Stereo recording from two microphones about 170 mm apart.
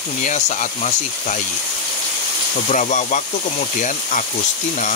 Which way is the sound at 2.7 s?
45° left (ahead or behind).